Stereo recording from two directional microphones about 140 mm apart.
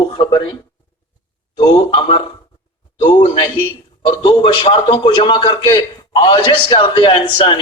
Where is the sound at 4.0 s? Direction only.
40° left (ahead or behind).